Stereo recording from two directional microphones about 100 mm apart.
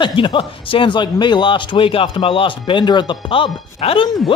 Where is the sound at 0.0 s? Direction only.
55° left (ahead or behind).